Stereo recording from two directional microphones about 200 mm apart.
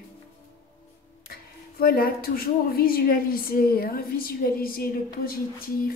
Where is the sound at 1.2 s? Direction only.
50° left (ahead or behind).